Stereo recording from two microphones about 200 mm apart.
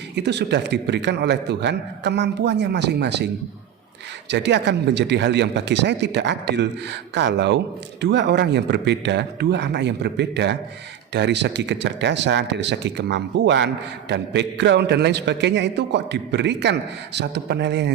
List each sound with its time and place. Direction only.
0.2 s a man's voice: 60° right (ahead or behind)
4.3 s a man's voice: 60° right (ahead or behind)